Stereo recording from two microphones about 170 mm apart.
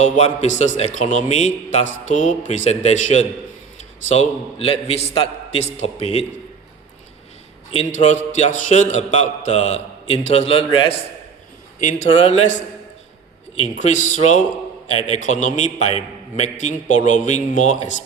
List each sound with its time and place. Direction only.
0.0 s a man's voice: 45° left (ahead or behind)
7.9 s a man's voice: 45° left (ahead or behind)
11.8 s a man's voice: 50° left (ahead or behind)
13.7 s a man's voice: 45° left (ahead or behind)